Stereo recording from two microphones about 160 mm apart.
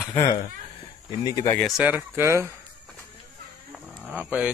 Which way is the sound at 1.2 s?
25° left (ahead or behind).